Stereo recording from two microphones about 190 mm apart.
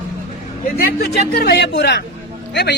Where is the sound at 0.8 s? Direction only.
55° left (ahead or behind).